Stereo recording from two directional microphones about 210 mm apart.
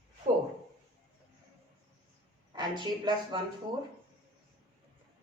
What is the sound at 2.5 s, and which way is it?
Speech, 20° right (ahead or behind).